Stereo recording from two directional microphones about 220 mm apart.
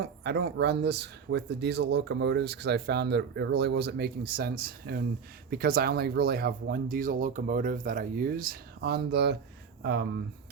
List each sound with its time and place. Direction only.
0.0 s speech: 50° right (ahead or behind)